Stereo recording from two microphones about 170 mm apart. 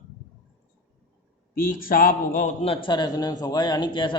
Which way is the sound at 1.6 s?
55° left (ahead or behind).